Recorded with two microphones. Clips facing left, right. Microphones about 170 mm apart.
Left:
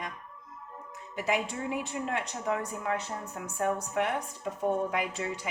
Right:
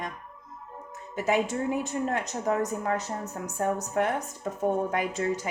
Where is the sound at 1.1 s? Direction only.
45° right (ahead or behind).